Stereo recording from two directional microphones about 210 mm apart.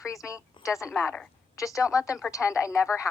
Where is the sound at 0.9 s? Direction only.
10° left (ahead or behind).